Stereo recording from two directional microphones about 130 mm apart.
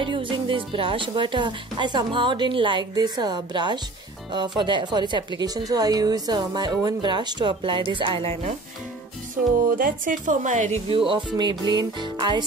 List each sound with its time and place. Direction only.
0.0 s a woman's voice: 40° right (ahead or behind)
9.8 s speech: 90° right; by 10.8 s 70° right (ahead or behind)
10.9 s a woman's voice: 45° right (ahead or behind)